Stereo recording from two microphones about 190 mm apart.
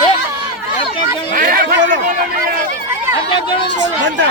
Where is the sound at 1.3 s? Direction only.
50° right (ahead or behind).